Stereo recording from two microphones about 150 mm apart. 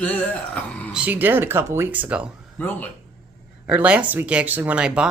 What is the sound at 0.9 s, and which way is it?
Speech, 10° right (ahead or behind).